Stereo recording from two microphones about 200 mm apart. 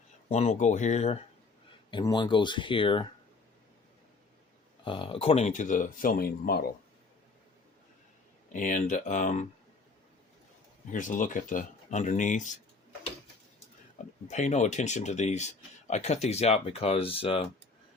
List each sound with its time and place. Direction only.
0.3 s speech: 30° left (ahead or behind)
1.9 s speech: 25° left (ahead or behind)
4.9 s speech: 25° left (ahead or behind); by 6.7 s 50° left (ahead or behind)
8.5 s speech: 40° left (ahead or behind)
10.9 s speech: 40° left (ahead or behind)
14.3 s speech: 35° left (ahead or behind)